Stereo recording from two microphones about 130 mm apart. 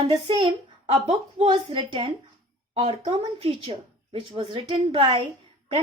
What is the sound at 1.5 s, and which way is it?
Speech, 35° right (ahead or behind).